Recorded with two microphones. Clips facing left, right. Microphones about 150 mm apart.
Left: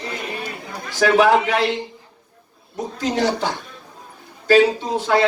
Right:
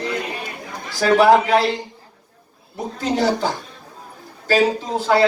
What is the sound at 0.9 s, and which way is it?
Speech, 40° right (ahead or behind).